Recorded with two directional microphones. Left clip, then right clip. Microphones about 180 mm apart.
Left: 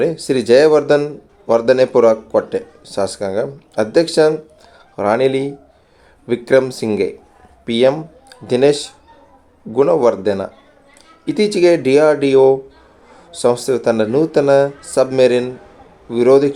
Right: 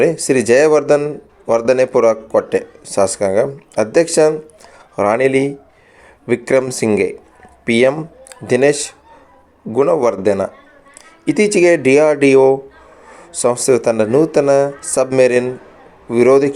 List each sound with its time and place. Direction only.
0.0 s a man's voice: 20° right (ahead or behind)